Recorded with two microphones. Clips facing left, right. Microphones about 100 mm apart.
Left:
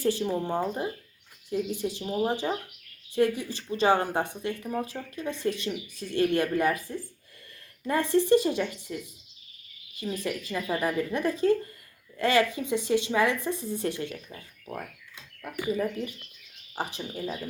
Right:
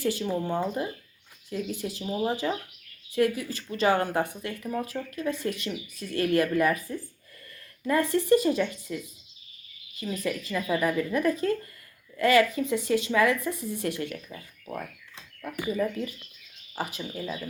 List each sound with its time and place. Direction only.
0.3 s speech: 30° left (ahead or behind)
1.5 s speech: 15° left (ahead or behind)
10.2 s speech: 25° left (ahead or behind)
15.4 s speech: 20° left (ahead or behind)